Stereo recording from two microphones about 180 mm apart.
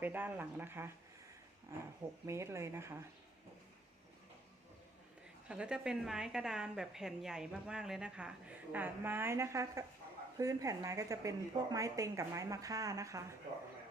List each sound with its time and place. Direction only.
0.0 s speech: 10° right (ahead or behind)
2.2 s speech: 15° right (ahead or behind)
5.5 s a woman's voice: 5° right (ahead or behind)